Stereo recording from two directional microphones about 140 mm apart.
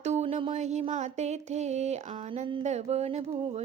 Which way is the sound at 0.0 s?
50° right (ahead or behind).